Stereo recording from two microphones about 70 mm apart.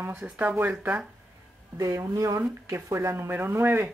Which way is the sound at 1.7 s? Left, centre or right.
Right.